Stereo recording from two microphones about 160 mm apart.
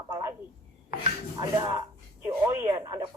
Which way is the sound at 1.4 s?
25° right (ahead or behind).